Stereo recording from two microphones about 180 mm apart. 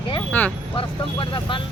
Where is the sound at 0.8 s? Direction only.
30° left (ahead or behind).